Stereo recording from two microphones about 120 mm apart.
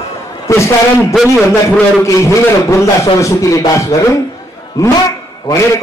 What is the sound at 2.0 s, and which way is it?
Speech, 25° left (ahead or behind).